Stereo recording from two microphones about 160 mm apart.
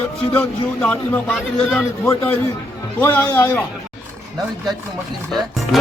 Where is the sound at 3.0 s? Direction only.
15° left (ahead or behind).